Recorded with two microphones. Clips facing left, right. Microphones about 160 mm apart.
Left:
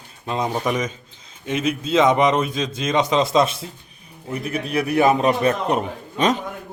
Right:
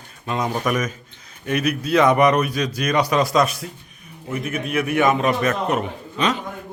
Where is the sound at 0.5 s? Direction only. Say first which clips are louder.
Even; 25° left (ahead or behind).